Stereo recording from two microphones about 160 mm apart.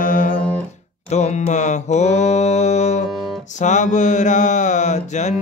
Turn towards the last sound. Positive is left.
turn(degrees=45)  # may be behind; listen again after turning